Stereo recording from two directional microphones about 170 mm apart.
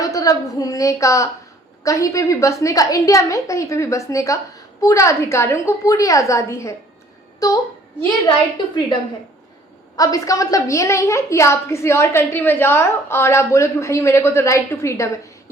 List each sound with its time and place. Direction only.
0.0 s a woman's voice: 20° left (ahead or behind)
10.0 s a woman's voice: 20° left (ahead or behind)